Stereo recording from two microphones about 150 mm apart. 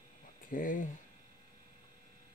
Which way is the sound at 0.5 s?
65° left (ahead or behind).